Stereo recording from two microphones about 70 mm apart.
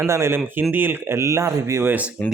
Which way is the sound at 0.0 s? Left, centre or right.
Right.